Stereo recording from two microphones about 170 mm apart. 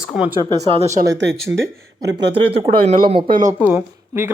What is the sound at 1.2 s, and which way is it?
Speech, 90° right.